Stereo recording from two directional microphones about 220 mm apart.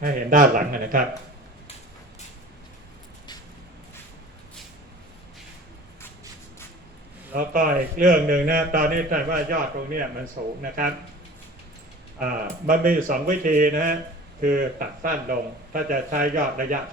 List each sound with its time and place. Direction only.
0.0 s a man's voice: 40° right (ahead or behind)
7.3 s a man's voice: 40° right (ahead or behind)
12.2 s a man's voice: 40° right (ahead or behind)